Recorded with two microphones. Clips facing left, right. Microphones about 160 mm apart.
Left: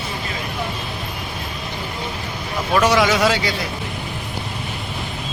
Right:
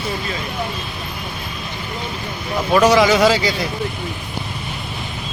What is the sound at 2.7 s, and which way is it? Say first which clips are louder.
Speech: right 3 dB; centre (ahead or behind).